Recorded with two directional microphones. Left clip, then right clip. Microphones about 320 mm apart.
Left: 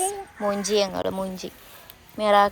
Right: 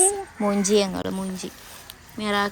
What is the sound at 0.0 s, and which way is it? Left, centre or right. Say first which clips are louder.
Speech: right 3 dB; centre.